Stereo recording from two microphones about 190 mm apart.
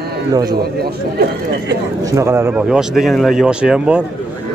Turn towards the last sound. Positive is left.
turn(degrees=-5)  # may be behind; listen again after turning